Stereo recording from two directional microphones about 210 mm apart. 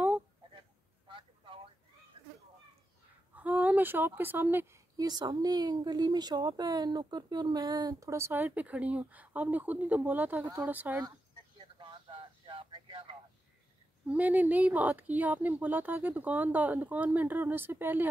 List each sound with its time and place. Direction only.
1.0 s a sound: 25° right (ahead or behind)
3.3 s speech: 5° right (ahead or behind); by 13.1 s 25° right (ahead or behind)
14.0 s speech: 5° right (ahead or behind)